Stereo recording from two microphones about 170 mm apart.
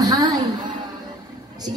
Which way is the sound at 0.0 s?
20° right (ahead or behind).